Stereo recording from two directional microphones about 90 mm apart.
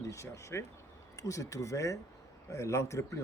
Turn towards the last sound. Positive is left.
turn(degrees=35)  # may be behind; listen again after turning